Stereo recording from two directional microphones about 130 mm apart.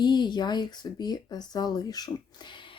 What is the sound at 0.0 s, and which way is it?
A woman's voice, 35° left (ahead or behind).